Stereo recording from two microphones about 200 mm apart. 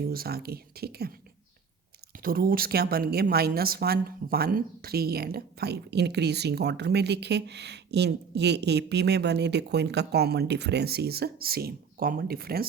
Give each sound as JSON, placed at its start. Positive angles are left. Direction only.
{"t": 0.1, "sound": "speech", "side_deg": -50}
{"t": 2.2, "sound": "a woman's voice", "side_deg": -45}